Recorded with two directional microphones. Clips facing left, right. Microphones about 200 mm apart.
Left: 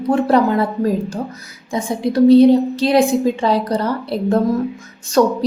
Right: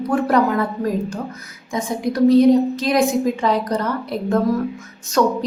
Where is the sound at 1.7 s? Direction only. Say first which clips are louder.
Left 3 dB; 30° left (ahead or behind).